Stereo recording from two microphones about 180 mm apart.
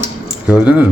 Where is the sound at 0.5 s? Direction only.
10° right (ahead or behind).